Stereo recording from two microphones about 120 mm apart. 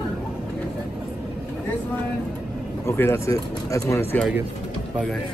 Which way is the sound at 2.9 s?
20° left (ahead or behind).